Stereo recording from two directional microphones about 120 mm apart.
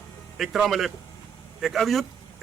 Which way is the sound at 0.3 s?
Centre (ahead or behind).